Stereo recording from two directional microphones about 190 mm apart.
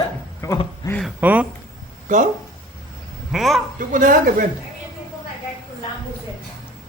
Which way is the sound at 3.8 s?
45° right (ahead or behind).